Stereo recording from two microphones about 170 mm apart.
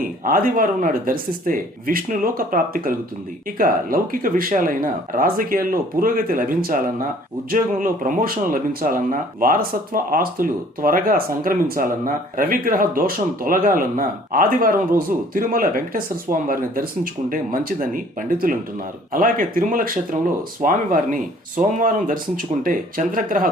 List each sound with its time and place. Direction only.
0.0 s speech: 55° right (ahead or behind)